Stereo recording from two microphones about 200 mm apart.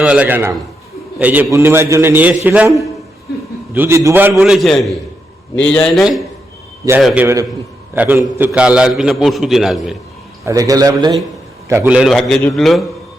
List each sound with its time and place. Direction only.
0.0 s a man's voice: 5° right (ahead or behind)
3.8 s a man's voice: 15° right (ahead or behind)
10.4 s a man's voice: 15° right (ahead or behind)
11.9 s a man's voice: centre (ahead or behind)